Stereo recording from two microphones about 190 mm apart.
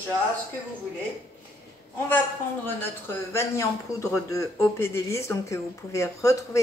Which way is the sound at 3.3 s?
15° left (ahead or behind).